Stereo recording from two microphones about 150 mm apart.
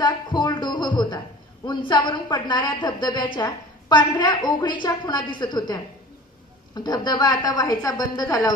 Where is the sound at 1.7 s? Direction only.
30° left (ahead or behind).